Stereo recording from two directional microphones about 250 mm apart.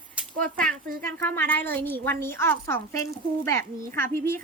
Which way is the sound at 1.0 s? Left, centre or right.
Centre.